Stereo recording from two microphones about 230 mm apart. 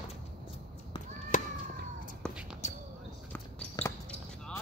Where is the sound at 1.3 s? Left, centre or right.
Left.